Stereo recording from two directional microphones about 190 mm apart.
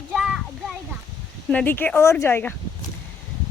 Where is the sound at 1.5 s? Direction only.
10° left (ahead or behind).